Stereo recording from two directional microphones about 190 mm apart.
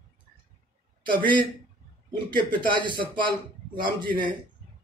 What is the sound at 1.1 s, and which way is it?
Speech, 25° right (ahead or behind).